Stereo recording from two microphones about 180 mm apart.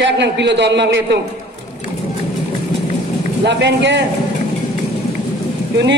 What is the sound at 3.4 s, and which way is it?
Speech, 75° right (ahead or behind).